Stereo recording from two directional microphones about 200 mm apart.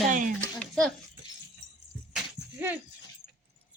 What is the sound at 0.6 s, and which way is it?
Speech, 5° left (ahead or behind).